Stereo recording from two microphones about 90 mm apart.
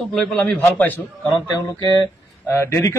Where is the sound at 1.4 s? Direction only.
50° left (ahead or behind).